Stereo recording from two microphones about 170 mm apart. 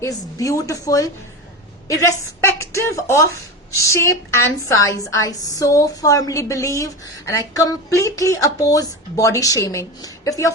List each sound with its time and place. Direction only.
0.0 s a woman's voice: 20° left (ahead or behind)
2.4 s a woman's voice: 15° left (ahead or behind)